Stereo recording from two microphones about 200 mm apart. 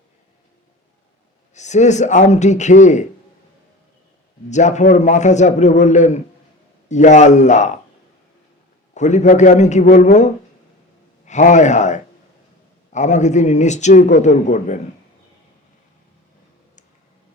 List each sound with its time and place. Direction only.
1.5 s a man's voice: 35° left (ahead or behind)
4.4 s a man's voice: 35° left (ahead or behind)
9.0 s a man's voice: 35° left (ahead or behind)